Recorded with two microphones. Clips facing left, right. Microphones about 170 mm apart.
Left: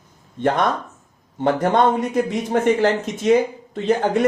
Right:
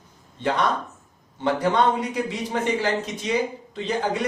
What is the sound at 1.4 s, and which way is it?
A man's voice, 50° left (ahead or behind).